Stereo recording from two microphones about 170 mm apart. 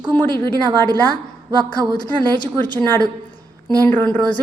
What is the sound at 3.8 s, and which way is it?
Speech, 10° left (ahead or behind).